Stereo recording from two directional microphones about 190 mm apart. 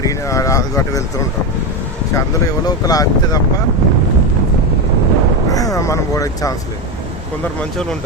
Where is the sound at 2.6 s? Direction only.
20° left (ahead or behind).